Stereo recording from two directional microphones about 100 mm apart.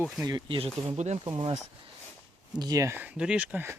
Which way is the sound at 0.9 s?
90° right.